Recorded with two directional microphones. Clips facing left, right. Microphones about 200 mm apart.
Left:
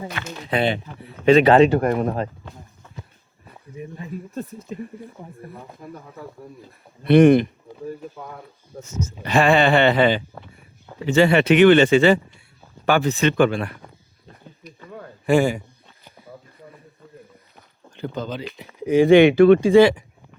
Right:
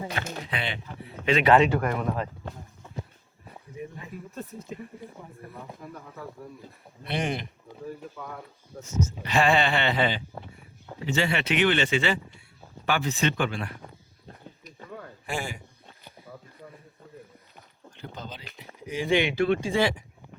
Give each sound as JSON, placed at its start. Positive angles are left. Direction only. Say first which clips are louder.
{"t": 0.1, "sound": "speech", "louder": "even", "side_deg": -40}
{"t": 0.5, "sound": "speech", "louder": "left 15 dB", "side_deg": 40}
{"t": 3.8, "sound": "speech", "louder": "left 4 dB", "side_deg": 30}
{"t": 7.0, "sound": "speech", "louder": "left 18 dB", "side_deg": 60}
{"t": 8.7, "sound": "speech", "louder": "left 4 dB", "side_deg": 30}
{"t": 9.2, "sound": "speech", "louder": "left 7 dB", "side_deg": 55}
{"t": 15.3, "sound": "a man's voice", "louder": "left 16 dB", "side_deg": 80}
{"t": 17.9, "sound": "speech", "louder": "left 12 dB", "side_deg": 75}
{"t": 18.6, "sound": "speech", "louder": "left 16 dB", "side_deg": 60}